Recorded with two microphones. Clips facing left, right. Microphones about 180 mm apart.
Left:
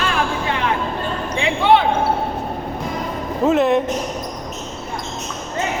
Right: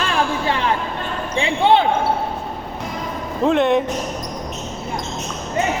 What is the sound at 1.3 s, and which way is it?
Basketball bounce, 30° right (ahead or behind).